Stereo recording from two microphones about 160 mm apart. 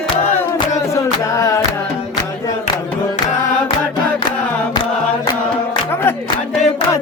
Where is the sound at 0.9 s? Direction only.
20° left (ahead or behind).